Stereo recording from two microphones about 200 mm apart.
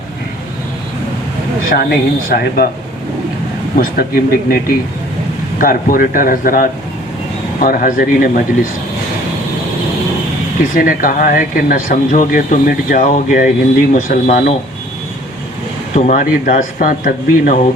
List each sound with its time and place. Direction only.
1.7 s speech: 50° left (ahead or behind)
3.8 s speech: 50° left (ahead or behind)
10.6 s speech: 45° left (ahead or behind)
16.0 s speech: 40° left (ahead or behind)